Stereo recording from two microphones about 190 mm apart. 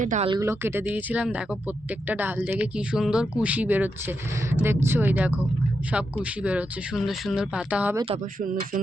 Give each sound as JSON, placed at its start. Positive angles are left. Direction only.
{"t": 0.0, "sound": "speech", "side_deg": -40}
{"t": 0.3, "sound": "speech", "side_deg": -15}
{"t": 7.9, "sound": "speech", "side_deg": -30}